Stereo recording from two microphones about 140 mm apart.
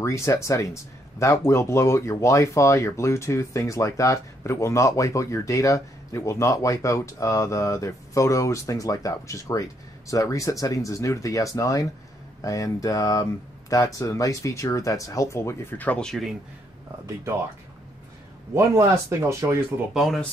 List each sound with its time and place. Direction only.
0.0 s speech: 20° left (ahead or behind); by 16.3 s centre (ahead or behind)
18.5 s speech: 20° right (ahead or behind)
19.9 s speech: centre (ahead or behind)